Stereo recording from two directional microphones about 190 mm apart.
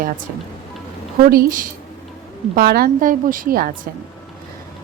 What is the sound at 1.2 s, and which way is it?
Speech, 50° right (ahead or behind).